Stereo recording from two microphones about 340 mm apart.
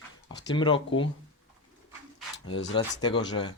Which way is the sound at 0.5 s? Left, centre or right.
Centre.